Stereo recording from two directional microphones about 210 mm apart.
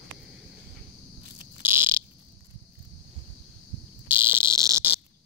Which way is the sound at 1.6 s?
10° right (ahead or behind).